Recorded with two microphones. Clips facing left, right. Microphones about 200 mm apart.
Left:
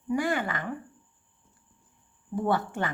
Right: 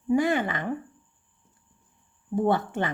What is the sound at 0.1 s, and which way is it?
Speech, 20° right (ahead or behind).